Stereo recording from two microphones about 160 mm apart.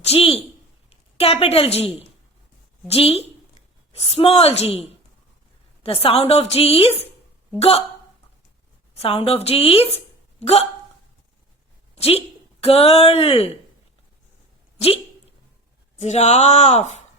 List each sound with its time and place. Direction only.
0.0 s a sound: 40° left (ahead or behind)
1.1 s a woman's voice: 40° left (ahead or behind)
9.0 s a woman's voice: 40° left (ahead or behind)
11.9 s a woman's voice: 40° left (ahead or behind)
16.0 s speech: 45° left (ahead or behind)